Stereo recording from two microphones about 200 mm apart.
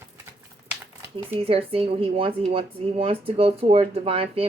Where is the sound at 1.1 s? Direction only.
30° right (ahead or behind).